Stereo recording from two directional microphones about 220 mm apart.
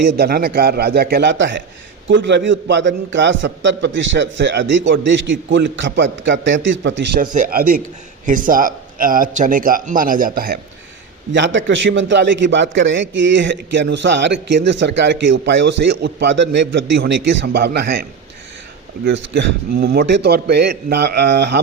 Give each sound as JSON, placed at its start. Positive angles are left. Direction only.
{"t": 0.2, "sound": "a man's voice", "side_deg": -45}
{"t": 7.2, "sound": "a man's voice", "side_deg": -40}
{"t": 11.3, "sound": "a man's voice", "side_deg": -55}
{"t": 19.0, "sound": "a man's voice", "side_deg": -55}